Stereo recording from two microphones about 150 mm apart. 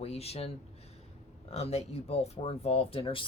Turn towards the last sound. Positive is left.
turn(degrees=35)  # may be behind; listen again after turning